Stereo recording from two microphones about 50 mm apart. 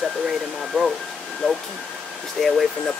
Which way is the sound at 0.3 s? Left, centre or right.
Centre.